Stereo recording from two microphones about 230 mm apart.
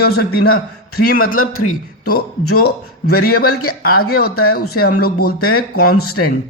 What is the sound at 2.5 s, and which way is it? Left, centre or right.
Speech, left.